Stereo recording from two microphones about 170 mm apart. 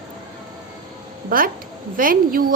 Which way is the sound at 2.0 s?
55° right (ahead or behind).